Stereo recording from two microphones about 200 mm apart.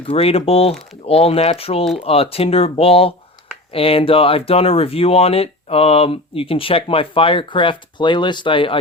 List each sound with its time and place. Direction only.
0.0 s speech: 30° left (ahead or behind)